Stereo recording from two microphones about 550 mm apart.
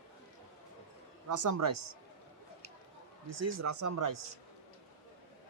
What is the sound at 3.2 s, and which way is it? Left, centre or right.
Speech, right.